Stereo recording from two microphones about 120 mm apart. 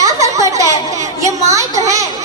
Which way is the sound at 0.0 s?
25° right (ahead or behind).